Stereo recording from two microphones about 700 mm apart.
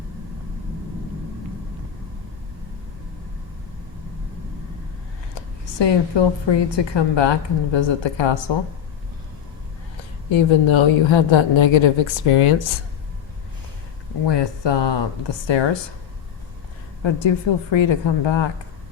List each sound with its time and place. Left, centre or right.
5.8 s a woman's voice: left
10.3 s a woman's voice: left
14.3 s a woman's voice: left
17.0 s a woman's voice: left